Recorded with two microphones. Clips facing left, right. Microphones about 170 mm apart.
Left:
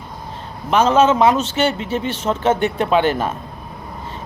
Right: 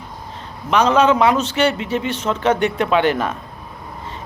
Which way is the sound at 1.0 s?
25° left (ahead or behind).